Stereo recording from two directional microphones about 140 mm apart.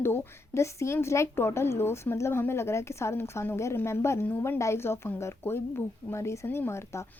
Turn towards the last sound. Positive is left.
turn(degrees=20)  # may be behind; listen again after turning